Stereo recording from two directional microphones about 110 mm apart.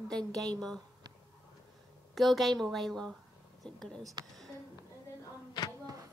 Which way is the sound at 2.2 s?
Centre (ahead or behind).